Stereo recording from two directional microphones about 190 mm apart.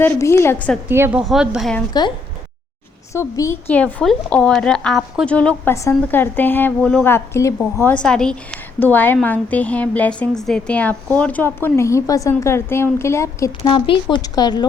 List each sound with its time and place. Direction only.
0.0 s a woman's voice: 15° left (ahead or behind)
0.9 s a woman's voice: 10° right (ahead or behind)
1.9 s a woman's voice: 20° left (ahead or behind)